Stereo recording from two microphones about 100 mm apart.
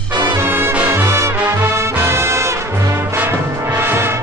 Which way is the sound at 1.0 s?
30° right (ahead or behind).